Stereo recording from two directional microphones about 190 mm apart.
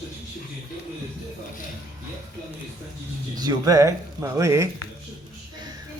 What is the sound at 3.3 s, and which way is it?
A man's voice, 20° right (ahead or behind).